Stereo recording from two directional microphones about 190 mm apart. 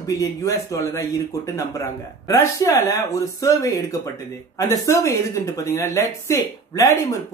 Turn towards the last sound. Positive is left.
turn(degrees=15)  # may be behind; listen again after turning